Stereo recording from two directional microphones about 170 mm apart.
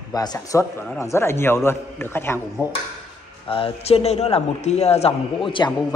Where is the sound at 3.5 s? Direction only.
35° left (ahead or behind).